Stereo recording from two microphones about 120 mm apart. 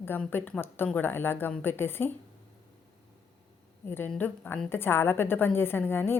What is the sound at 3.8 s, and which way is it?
A woman's voice, 20° left (ahead or behind).